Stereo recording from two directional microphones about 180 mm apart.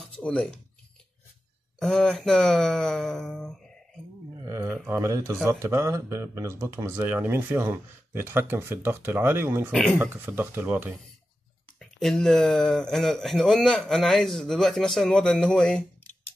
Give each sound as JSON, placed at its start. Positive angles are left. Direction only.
{"t": 0.2, "sound": "speech", "side_deg": 5}
{"t": 1.8, "sound": "speech", "side_deg": 5}
{"t": 4.5, "sound": "speech", "side_deg": -15}
{"t": 9.7, "sound": "speech", "side_deg": 5}
{"t": 9.9, "sound": "speech", "side_deg": -10}
{"t": 11.8, "sound": "speech", "side_deg": 0}